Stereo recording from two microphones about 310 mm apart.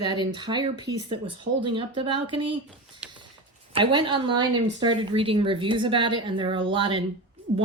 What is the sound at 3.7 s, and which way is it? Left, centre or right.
Speech, centre.